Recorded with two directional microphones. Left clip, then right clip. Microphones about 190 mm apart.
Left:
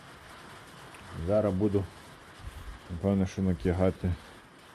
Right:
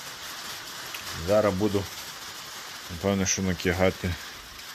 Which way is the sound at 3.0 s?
Centre (ahead or behind).